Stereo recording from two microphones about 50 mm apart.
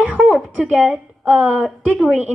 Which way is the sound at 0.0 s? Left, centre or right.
Right.